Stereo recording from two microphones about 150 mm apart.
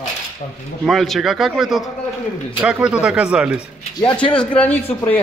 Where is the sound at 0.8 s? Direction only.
Centre (ahead or behind).